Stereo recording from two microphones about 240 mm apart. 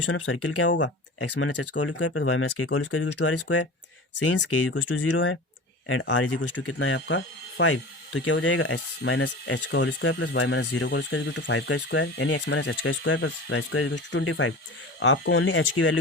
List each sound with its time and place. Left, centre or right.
0.0 s speech: left
1.2 s speech: left
4.1 s speech: left
5.1 s speech: left
6.2 s speech: left